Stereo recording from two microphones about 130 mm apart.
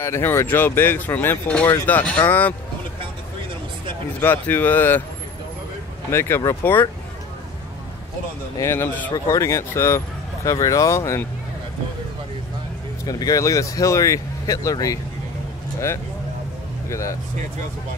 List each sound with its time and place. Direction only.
0.0 s speech: 20° left (ahead or behind)
4.2 s speech: 15° left (ahead or behind)
6.1 s speech: 20° left (ahead or behind)
8.5 s speech: 20° left (ahead or behind)
13.0 s speech: 30° left (ahead or behind)